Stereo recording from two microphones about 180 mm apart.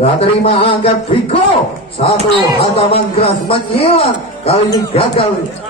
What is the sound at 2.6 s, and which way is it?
Speech, 35° left (ahead or behind).